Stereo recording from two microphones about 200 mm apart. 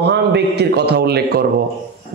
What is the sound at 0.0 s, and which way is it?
A man's voice, 55° right (ahead or behind).